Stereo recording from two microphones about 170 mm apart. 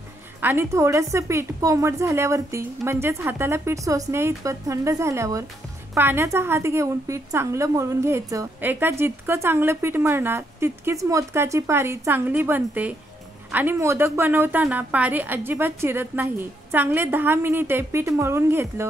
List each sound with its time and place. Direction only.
0.4 s a woman's voice: 15° right (ahead or behind)